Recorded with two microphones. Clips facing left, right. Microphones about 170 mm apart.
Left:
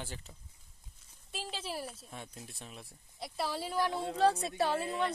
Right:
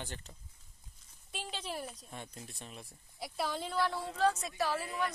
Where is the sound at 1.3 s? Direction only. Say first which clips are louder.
Left 1 dB; centre (ahead or behind).